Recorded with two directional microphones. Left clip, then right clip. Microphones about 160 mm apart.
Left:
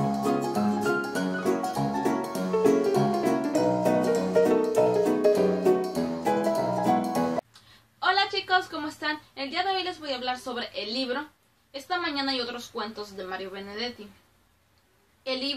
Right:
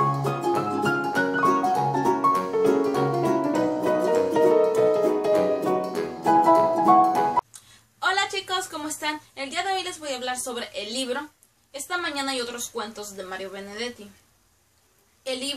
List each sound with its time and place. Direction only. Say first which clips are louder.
0.0 s music: right 3 dB; centre (ahead or behind)
8.0 s a sound: even; 5° right (ahead or behind)
11.7 s speech: right 1 dB; 5° right (ahead or behind)
15.2 s speech: even; 5° right (ahead or behind)